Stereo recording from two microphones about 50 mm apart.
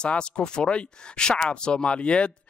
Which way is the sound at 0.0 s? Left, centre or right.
Centre.